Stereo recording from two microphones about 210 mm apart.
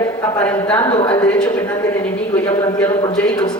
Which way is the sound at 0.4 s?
10° left (ahead or behind).